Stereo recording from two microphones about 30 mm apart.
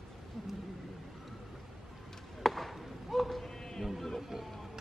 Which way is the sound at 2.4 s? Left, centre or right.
Centre.